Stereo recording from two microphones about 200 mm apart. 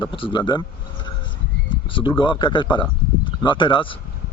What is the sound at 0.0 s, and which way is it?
Speech, 25° left (ahead or behind).